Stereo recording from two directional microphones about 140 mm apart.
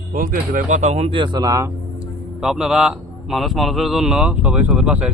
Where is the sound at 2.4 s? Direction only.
5° right (ahead or behind).